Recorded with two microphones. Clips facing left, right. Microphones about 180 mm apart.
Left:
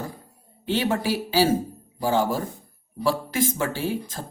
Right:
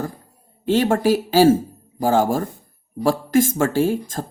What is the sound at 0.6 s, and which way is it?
Speech, 45° right (ahead or behind).